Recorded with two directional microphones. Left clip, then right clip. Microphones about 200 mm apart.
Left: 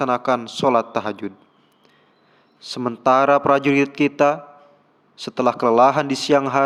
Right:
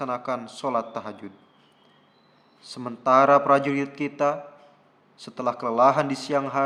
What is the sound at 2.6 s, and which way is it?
A man's voice, 35° left (ahead or behind).